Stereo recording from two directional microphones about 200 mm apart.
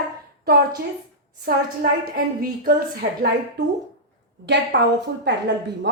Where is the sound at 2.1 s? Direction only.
45° right (ahead or behind).